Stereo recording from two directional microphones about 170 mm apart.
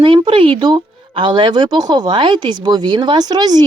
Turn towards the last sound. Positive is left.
turn(degrees=-25)  # may be behind; listen again after turning